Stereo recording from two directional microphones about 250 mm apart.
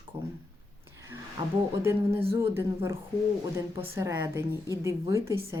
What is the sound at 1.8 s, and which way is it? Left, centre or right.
Speech, centre.